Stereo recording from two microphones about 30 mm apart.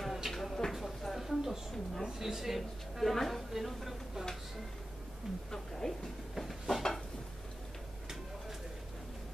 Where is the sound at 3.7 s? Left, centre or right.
Centre.